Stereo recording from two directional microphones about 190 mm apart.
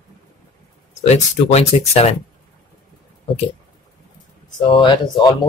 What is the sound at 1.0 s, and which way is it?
Speech, 35° left (ahead or behind).